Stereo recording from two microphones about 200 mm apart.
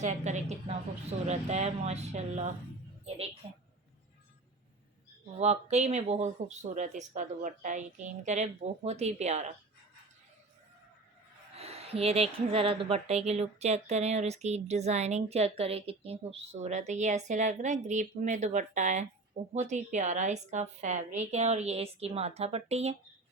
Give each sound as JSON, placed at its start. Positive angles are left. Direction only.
{"t": 0.0, "sound": "a woman's voice", "side_deg": -35}
{"t": 5.4, "sound": "speech", "side_deg": -35}
{"t": 11.5, "sound": "speech", "side_deg": -30}